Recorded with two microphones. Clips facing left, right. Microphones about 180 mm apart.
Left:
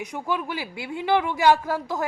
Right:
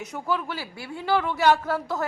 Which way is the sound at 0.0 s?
10° left (ahead or behind).